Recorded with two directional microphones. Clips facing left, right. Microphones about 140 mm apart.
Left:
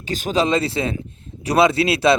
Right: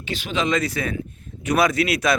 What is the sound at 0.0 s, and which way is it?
Speech, 40° left (ahead or behind).